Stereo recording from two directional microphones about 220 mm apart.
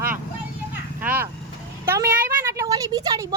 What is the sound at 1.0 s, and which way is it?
Speech, 10° right (ahead or behind).